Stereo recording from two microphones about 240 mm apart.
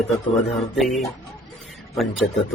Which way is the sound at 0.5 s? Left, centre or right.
Centre.